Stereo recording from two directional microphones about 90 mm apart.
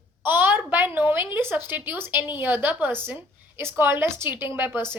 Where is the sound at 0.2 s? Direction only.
20° right (ahead or behind).